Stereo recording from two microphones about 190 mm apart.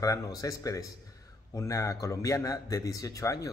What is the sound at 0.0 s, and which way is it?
Speech, 20° left (ahead or behind).